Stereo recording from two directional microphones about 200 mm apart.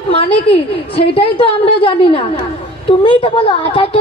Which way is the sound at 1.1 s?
25° left (ahead or behind).